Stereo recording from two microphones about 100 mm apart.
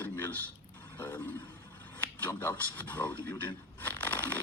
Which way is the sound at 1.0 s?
20° left (ahead or behind).